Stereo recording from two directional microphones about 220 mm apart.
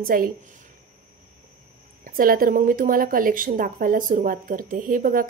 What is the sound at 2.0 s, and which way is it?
A woman's voice, 40° right (ahead or behind).